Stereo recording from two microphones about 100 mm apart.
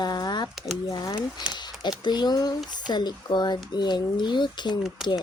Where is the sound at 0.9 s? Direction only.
45° left (ahead or behind).